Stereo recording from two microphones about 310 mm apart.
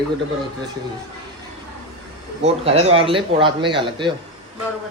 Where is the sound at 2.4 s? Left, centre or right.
Centre.